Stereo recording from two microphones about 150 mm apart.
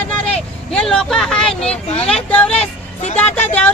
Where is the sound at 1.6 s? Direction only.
45° left (ahead or behind).